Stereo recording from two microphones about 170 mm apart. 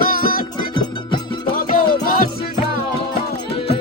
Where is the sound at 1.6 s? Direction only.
55° left (ahead or behind).